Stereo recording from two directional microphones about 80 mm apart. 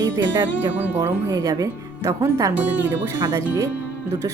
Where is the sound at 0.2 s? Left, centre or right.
Right.